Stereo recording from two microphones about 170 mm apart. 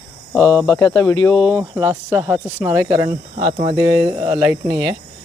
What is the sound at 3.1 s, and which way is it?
Speech, 40° right (ahead or behind).